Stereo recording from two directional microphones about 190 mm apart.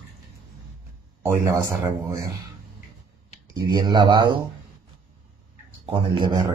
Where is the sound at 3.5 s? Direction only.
25° right (ahead or behind).